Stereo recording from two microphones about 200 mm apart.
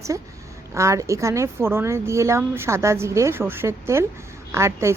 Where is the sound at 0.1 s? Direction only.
15° right (ahead or behind).